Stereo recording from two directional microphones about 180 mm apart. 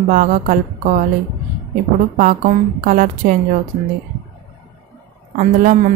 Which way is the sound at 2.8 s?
50° right (ahead or behind).